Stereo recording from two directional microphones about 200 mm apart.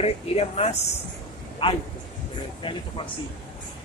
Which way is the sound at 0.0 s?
30° left (ahead or behind).